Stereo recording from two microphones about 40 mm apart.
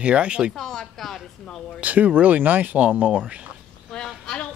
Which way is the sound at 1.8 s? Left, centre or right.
Right.